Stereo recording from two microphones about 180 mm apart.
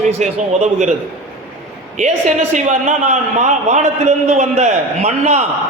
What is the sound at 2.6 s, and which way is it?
A man's voice, 40° right (ahead or behind).